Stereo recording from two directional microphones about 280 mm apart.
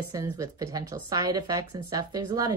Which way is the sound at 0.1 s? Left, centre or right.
Centre.